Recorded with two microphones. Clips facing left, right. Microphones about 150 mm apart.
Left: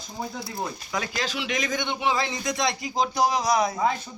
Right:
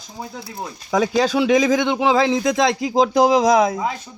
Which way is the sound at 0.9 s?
90° right.